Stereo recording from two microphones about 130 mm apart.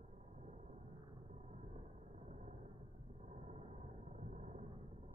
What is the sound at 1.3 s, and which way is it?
Whale vocalization, 65° right (ahead or behind).